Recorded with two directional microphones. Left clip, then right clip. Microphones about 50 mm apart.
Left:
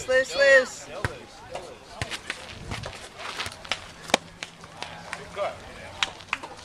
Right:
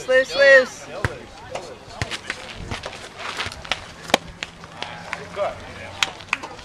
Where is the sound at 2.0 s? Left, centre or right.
Centre.